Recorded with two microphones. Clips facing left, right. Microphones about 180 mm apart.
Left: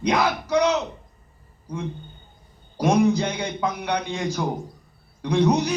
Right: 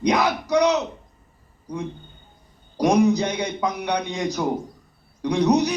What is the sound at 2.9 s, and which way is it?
A man's voice, 15° right (ahead or behind).